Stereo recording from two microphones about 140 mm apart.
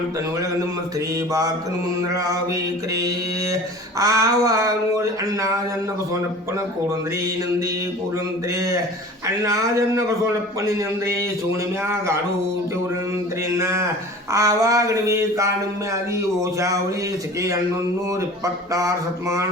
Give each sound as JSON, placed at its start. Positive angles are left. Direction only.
{"t": 0.9, "sound": "mantra", "side_deg": -25}
{"t": 9.2, "sound": "mantra", "side_deg": -25}
{"t": 13.6, "sound": "mantra", "side_deg": -20}
{"t": 18.1, "sound": "mantra", "side_deg": -25}